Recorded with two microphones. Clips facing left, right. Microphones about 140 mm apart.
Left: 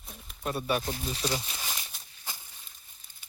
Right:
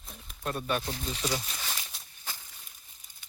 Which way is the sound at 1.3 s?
5° left (ahead or behind).